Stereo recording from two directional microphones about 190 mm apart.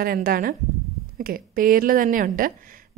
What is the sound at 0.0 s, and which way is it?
A woman's voice, 50° right (ahead or behind).